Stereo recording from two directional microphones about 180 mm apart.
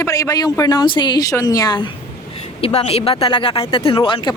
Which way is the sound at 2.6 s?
35° left (ahead or behind).